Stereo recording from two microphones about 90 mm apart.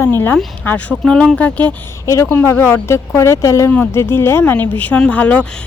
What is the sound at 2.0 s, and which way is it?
Speech, 35° left (ahead or behind).